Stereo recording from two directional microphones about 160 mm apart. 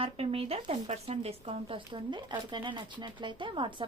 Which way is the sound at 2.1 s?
30° right (ahead or behind).